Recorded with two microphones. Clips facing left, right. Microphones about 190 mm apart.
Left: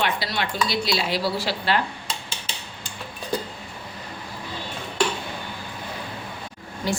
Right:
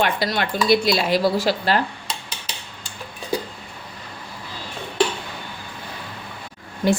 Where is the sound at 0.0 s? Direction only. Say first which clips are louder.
Right 4 dB; 50° right (ahead or behind).